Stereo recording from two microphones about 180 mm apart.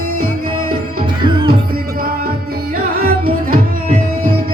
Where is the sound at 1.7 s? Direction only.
55° right (ahead or behind).